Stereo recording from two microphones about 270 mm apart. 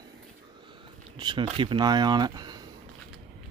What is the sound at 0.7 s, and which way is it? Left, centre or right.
Speech, centre.